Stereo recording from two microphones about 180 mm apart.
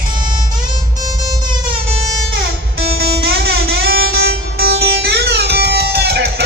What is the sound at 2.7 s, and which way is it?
Music, 60° right (ahead or behind).